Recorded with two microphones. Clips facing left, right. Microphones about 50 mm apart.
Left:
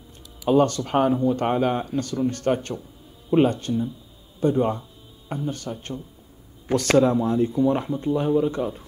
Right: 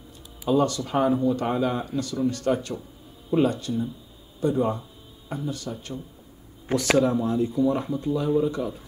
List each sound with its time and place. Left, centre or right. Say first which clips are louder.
0.5 s speech: left 3 dB; left
7.0 s speech: left 5 dB; left